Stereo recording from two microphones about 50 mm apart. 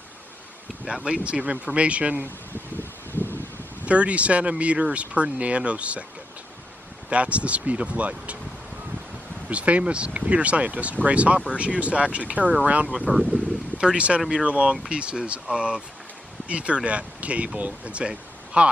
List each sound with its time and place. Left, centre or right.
0.8 s speech: centre
2.8 s a sound: left
3.8 s speech: right
7.1 s speech: right
9.5 s speech: right